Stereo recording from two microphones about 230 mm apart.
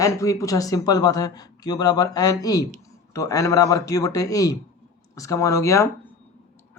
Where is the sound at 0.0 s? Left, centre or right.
Centre.